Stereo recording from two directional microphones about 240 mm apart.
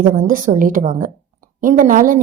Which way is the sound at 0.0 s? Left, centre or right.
Right.